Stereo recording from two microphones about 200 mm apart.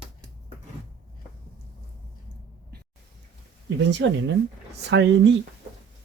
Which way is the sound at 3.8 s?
60° right (ahead or behind).